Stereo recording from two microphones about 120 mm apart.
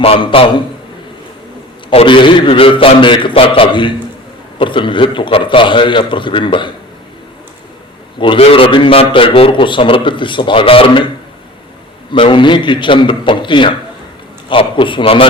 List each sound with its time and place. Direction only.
0.0 s a man's voice: 50° left (ahead or behind)
1.9 s a man's voice: 50° left (ahead or behind)
8.2 s a man's voice: 50° left (ahead or behind)
12.1 s a man's voice: 45° left (ahead or behind)